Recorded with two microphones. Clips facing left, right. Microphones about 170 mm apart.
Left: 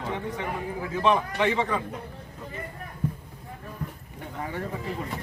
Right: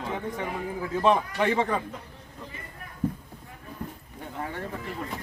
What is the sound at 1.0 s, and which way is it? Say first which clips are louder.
Speech: even; 40° right (ahead or behind).